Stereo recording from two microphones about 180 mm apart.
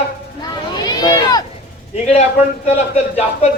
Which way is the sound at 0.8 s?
25° left (ahead or behind).